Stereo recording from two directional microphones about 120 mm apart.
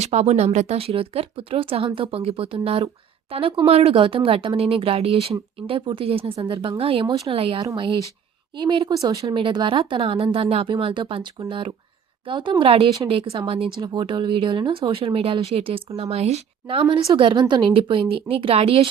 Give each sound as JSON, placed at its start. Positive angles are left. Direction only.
{"t": 0.0, "sound": "speech", "side_deg": -70}
{"t": 8.9, "sound": "speech", "side_deg": -30}
{"t": 9.3, "sound": "speech", "side_deg": -40}